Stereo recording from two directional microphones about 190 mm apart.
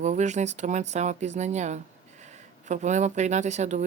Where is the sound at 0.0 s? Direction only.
40° right (ahead or behind).